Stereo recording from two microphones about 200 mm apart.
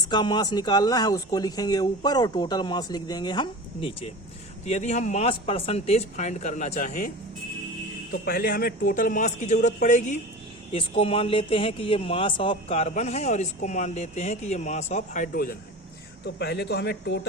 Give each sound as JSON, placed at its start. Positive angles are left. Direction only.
{"t": 0.1, "sound": "a man's voice", "side_deg": 20}
{"t": 8.1, "sound": "a man's voice", "side_deg": 45}
{"t": 16.2, "sound": "speech", "side_deg": 55}